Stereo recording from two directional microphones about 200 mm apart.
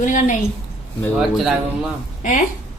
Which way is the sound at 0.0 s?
40° left (ahead or behind).